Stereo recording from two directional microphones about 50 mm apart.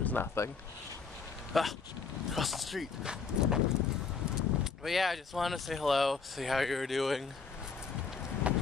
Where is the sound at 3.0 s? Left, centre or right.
Centre.